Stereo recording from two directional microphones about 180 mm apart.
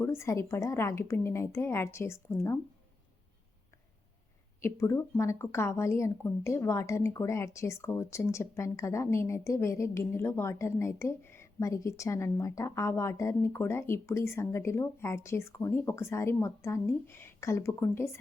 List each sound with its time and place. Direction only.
0.0 s a woman's voice: 15° left (ahead or behind)
4.6 s a woman's voice: 15° left (ahead or behind)